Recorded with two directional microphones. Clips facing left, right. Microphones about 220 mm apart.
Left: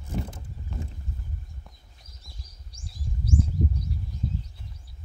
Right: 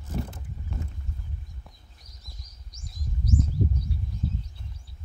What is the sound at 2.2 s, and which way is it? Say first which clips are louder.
Bird: left 2 dB; 30° left (ahead or behind).